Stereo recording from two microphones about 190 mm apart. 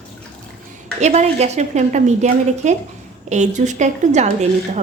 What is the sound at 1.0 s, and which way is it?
A woman's voice, 35° right (ahead or behind).